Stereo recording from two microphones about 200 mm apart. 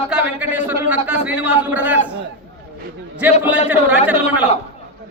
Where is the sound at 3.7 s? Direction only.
10° right (ahead or behind).